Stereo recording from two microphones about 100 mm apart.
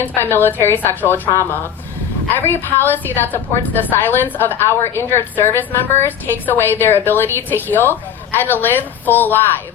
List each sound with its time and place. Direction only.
0.0 s a woman's voice: 20° left (ahead or behind)